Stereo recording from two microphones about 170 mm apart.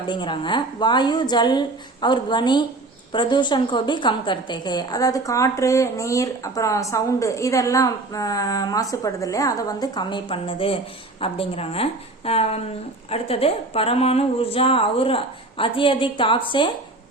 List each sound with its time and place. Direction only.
0.1 s a woman's voice: 30° left (ahead or behind)